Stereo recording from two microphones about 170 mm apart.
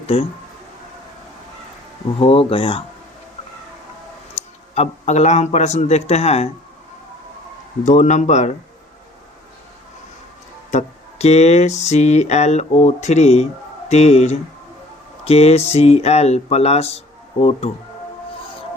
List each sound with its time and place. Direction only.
0.1 s music: 35° left (ahead or behind)
2.1 s music: 35° left (ahead or behind)
4.7 s music: 40° left (ahead or behind)
7.9 s a man's voice: 45° left (ahead or behind)
10.7 s music: 40° left (ahead or behind)